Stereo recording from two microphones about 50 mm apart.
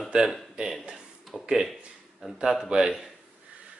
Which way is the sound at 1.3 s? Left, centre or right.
Centre.